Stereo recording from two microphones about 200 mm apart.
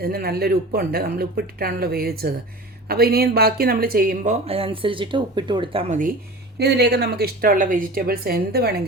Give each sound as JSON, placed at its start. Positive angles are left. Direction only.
{"t": 0.0, "sound": "speech", "side_deg": -50}
{"t": 5.9, "sound": "speech", "side_deg": -40}
{"t": 6.6, "sound": "speech", "side_deg": -55}